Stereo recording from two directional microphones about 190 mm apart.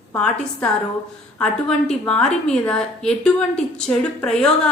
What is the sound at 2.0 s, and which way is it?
A woman's voice, 5° left (ahead or behind).